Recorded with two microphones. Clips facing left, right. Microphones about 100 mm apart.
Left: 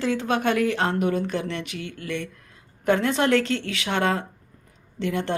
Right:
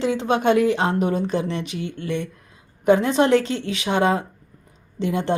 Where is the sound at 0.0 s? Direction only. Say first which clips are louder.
Right 3 dB; 20° right (ahead or behind).